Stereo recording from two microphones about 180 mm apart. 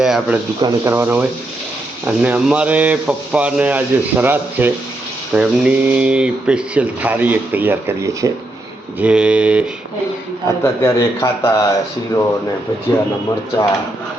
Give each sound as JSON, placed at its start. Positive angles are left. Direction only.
{"t": 0.0, "sound": "speech", "side_deg": -5}
{"t": 0.6, "sound": "speech", "side_deg": -15}
{"t": 10.6, "sound": "speech", "side_deg": 15}